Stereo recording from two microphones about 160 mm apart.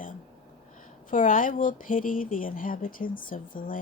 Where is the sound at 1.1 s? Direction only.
55° left (ahead or behind).